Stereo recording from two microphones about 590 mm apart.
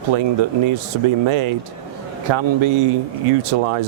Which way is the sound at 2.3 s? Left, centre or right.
Right.